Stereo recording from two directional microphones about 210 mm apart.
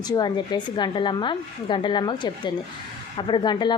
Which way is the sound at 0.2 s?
20° left (ahead or behind).